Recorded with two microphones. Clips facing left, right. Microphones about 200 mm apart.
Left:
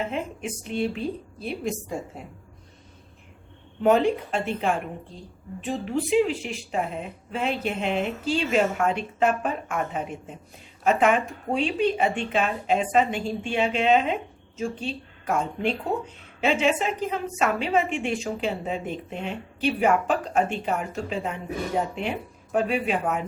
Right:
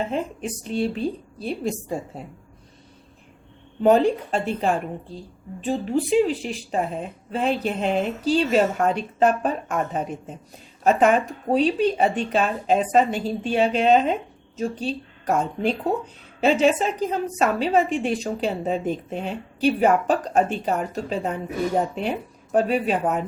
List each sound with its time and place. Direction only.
0.1 s speech: 35° right (ahead or behind)
3.8 s speech: 35° right (ahead or behind)
22.5 s speech: 35° right (ahead or behind)